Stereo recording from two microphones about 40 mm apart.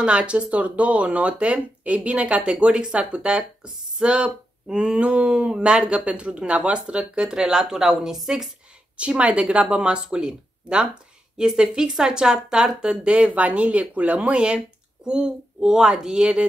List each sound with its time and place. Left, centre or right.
0.0 s speech: right; by 8.5 s centre
8.9 s a woman's voice: right
13.0 s speech: right